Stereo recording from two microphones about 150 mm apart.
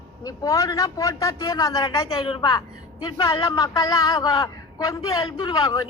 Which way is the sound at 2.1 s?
35° left (ahead or behind).